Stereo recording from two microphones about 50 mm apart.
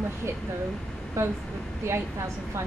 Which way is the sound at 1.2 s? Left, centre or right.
Right.